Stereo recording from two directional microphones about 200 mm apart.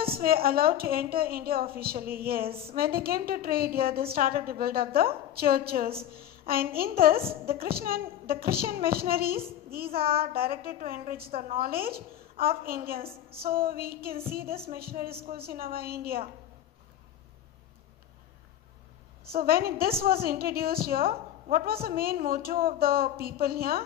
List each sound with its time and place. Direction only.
0.2 s a woman's voice: 50° right (ahead or behind)
13.0 s a sound: 30° right (ahead or behind)
13.5 s a woman's voice: 45° right (ahead or behind)
19.3 s a woman's voice: 50° right (ahead or behind)